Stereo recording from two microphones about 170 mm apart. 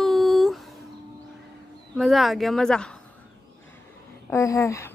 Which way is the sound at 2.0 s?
Centre (ahead or behind).